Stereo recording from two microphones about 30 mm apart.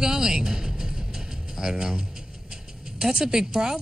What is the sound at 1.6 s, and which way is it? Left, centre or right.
Speech, right.